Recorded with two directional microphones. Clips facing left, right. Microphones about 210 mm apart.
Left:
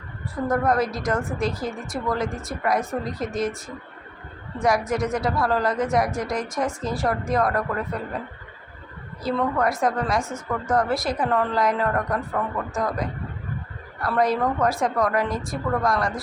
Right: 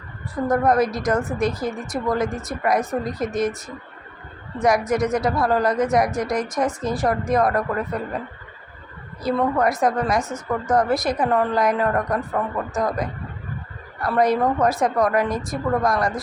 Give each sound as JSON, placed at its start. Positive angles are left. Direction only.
{"t": 0.4, "sound": "speech", "side_deg": -20}
{"t": 4.6, "sound": "speech", "side_deg": -20}
{"t": 9.2, "sound": "speech", "side_deg": -20}
{"t": 14.0, "sound": "speech", "side_deg": -20}